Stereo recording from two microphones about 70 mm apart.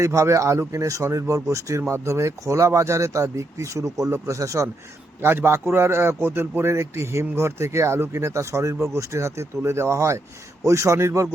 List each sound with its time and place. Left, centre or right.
0.0 s speech: right
5.2 s a man's voice: right